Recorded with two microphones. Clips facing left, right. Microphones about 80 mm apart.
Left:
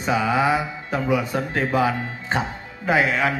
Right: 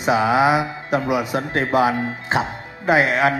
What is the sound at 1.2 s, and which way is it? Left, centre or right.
Speech, right.